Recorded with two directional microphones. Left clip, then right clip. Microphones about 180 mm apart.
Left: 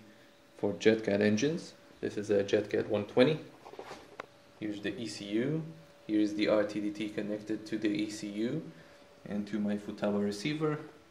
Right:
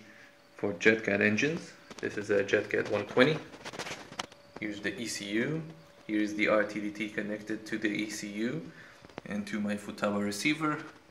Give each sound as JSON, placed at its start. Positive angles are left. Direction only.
{"t": 0.6, "sound": "speech", "side_deg": 10}
{"t": 4.6, "sound": "speech", "side_deg": 5}